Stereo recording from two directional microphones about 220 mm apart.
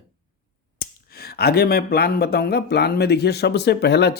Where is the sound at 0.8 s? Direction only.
45° left (ahead or behind).